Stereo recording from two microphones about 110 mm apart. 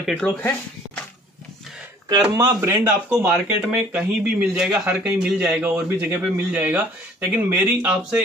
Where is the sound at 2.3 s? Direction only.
25° right (ahead or behind).